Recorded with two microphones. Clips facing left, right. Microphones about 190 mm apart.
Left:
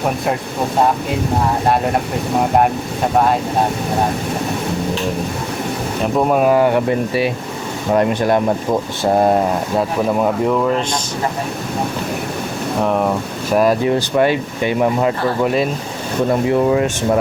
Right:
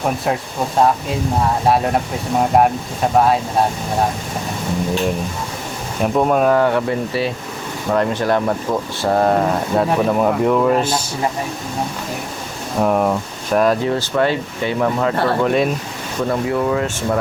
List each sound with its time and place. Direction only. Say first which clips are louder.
1.6 s speech: right 2 dB; centre (ahead or behind)
6.1 s speech: left 1 dB; 5° left (ahead or behind)
9.7 s speech: right 2 dB; 5° left (ahead or behind)
13.5 s speech: left 2 dB; 10° left (ahead or behind)
16.3 s speech: left 4 dB; 20° left (ahead or behind)